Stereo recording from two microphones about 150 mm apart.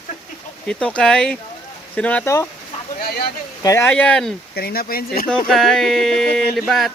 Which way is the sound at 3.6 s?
20° left (ahead or behind).